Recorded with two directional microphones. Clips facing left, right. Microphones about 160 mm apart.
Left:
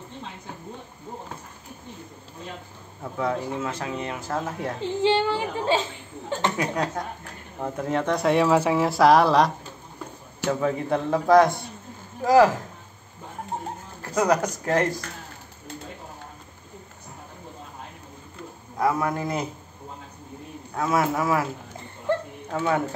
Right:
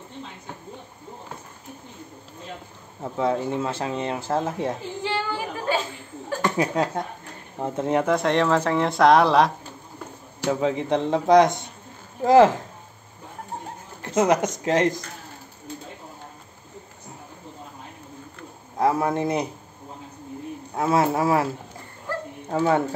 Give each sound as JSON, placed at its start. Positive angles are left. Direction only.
{"t": 3.0, "sound": "speech", "side_deg": -25}
{"t": 5.0, "sound": "speech", "side_deg": 25}
{"t": 6.5, "sound": "speech", "side_deg": -25}
{"t": 8.0, "sound": "speech", "side_deg": 0}
{"t": 10.4, "sound": "speech", "side_deg": -20}
{"t": 14.0, "sound": "speech", "side_deg": -20}
{"t": 18.8, "sound": "a man's voice", "side_deg": -25}
{"t": 20.7, "sound": "speech", "side_deg": -30}
{"t": 22.5, "sound": "speech", "side_deg": -35}